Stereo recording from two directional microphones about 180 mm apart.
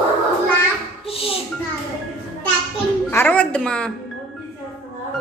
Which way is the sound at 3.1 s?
10° left (ahead or behind).